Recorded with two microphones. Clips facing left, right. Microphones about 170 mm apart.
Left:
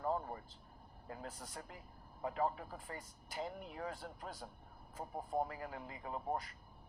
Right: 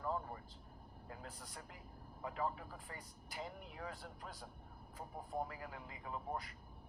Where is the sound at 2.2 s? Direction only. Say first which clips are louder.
Left 4 dB; 40° left (ahead or behind).